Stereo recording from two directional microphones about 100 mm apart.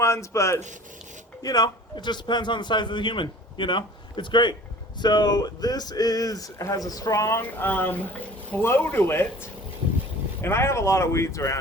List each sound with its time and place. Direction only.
0.0 s speech: 30° left (ahead or behind)
1.4 s a man's voice: 40° left (ahead or behind); by 9.2 s 20° left (ahead or behind)
10.4 s speech: 25° left (ahead or behind)